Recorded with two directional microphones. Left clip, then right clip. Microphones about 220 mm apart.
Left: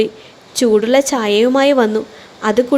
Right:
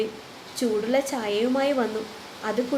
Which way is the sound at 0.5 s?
45° left (ahead or behind).